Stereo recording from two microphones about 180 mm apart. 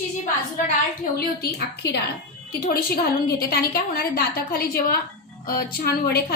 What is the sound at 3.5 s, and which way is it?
A woman's voice, 60° left (ahead or behind).